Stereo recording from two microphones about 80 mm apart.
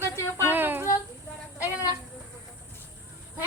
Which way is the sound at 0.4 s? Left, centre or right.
Right.